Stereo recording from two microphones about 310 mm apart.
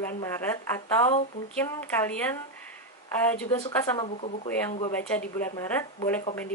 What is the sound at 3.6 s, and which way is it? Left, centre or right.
Speech, centre.